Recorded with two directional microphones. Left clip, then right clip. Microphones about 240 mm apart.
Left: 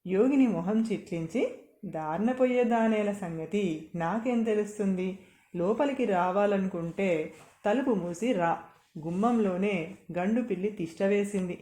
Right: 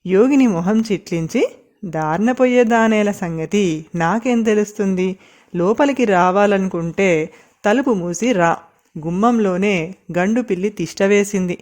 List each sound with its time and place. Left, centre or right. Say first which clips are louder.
0.0 s speech: right 11 dB; right